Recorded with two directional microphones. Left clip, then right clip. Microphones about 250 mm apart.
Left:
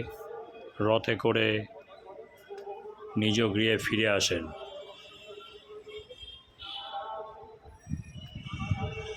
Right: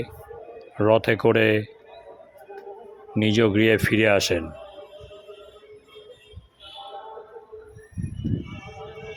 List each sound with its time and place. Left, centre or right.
0.8 s speech: right
3.2 s speech: right